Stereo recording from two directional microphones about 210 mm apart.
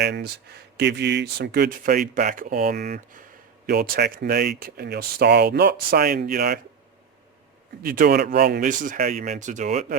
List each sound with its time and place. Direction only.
0.0 s speech: 50° right (ahead or behind)
7.8 s speech: 45° right (ahead or behind)